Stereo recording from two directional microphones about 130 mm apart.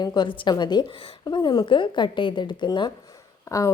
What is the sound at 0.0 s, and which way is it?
A woman's voice, 35° left (ahead or behind).